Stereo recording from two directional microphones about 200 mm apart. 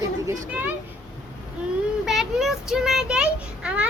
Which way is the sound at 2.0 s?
Centre (ahead or behind).